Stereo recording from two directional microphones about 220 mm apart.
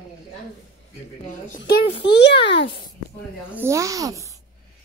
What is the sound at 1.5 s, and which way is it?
A child's voice, 50° left (ahead or behind).